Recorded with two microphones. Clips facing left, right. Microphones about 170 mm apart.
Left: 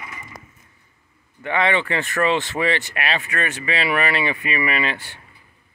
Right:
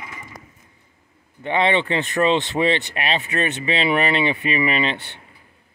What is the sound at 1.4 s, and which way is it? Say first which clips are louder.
Speech: right 2 dB; 25° right (ahead or behind).